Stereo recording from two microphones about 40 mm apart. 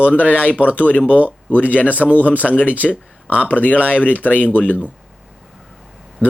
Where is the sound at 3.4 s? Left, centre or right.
Left.